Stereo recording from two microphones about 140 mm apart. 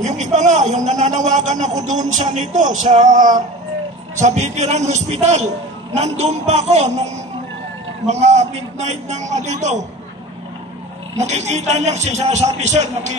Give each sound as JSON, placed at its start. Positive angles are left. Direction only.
{"t": 0.0, "sound": "a man's voice", "side_deg": -60}
{"t": 4.2, "sound": "a man's voice", "side_deg": -55}
{"t": 8.1, "sound": "a man's voice", "side_deg": -55}
{"t": 11.1, "sound": "a man's voice", "side_deg": -55}